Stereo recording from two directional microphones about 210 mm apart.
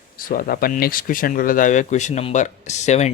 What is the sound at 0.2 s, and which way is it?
Speech, 40° left (ahead or behind).